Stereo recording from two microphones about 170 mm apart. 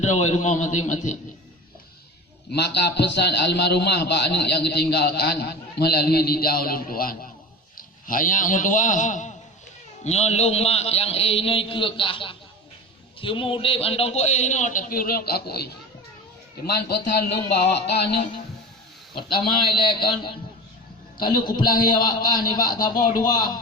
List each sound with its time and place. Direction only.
0.0 s a man's voice: 40° left (ahead or behind)
2.5 s a man's voice: 75° left (ahead or behind)
19.1 s a man's voice: 30° left (ahead or behind)